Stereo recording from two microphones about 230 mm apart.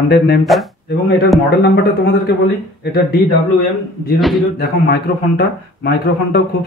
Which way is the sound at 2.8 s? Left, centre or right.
Left.